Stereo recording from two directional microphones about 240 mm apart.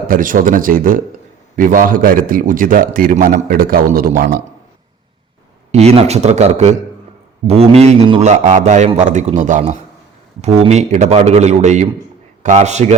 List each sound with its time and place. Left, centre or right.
0.1 s a man's voice: right
5.7 s a man's voice: right